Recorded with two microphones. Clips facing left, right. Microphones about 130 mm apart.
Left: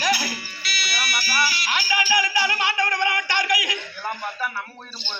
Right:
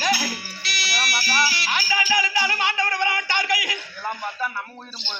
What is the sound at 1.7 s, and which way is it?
Speech, 15° left (ahead or behind).